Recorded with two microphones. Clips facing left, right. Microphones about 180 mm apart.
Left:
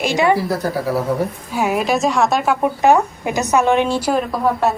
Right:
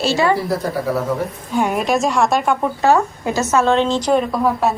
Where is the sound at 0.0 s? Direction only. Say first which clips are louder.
Left 1 dB; 15° left (ahead or behind).